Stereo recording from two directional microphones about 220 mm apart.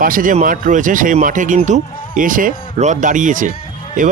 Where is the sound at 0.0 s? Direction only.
40° right (ahead or behind).